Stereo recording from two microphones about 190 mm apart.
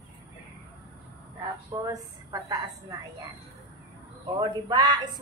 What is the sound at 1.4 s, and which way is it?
A woman's voice, 20° right (ahead or behind).